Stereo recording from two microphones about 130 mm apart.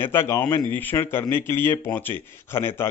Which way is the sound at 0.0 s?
20° left (ahead or behind).